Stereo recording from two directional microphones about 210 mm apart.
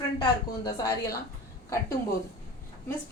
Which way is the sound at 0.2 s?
15° left (ahead or behind).